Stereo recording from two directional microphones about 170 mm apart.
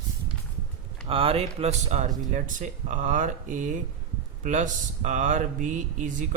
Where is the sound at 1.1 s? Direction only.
35° right (ahead or behind).